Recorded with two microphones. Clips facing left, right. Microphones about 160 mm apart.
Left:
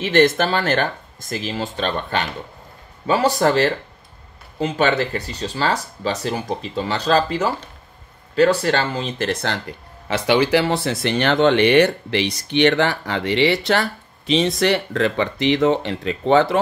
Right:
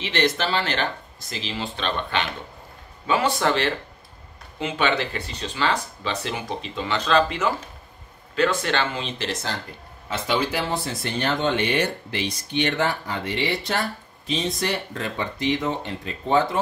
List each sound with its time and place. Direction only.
0.0 s speech: 50° left (ahead or behind)
10.0 s speech: 80° left